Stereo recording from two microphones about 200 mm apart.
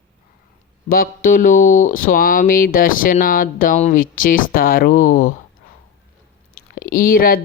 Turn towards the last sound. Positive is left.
turn(degrees=45)  # may be behind; listen again after turning